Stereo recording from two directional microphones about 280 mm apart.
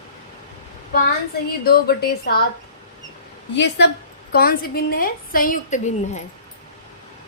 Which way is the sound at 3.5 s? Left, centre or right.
Left.